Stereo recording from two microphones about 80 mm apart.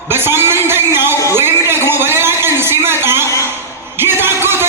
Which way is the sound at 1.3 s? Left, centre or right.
Right.